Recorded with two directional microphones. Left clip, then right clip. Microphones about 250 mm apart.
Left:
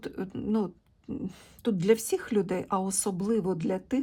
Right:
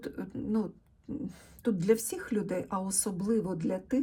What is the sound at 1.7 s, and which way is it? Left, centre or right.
Speech, centre.